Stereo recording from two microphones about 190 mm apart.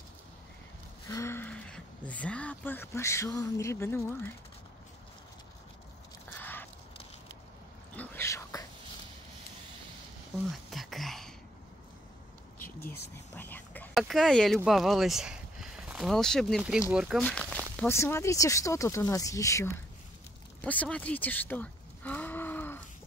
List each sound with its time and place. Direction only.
1.0 s speech: 15° left (ahead or behind)
6.4 s a sound: 10° left (ahead or behind)
7.9 s whispering: 10° left (ahead or behind)
10.7 s whispering: centre (ahead or behind)
12.8 s whispering: 10° left (ahead or behind)
13.9 s speech: centre (ahead or behind)
17.2 s speech: 5° left (ahead or behind)
20.6 s a sound: 10° left (ahead or behind)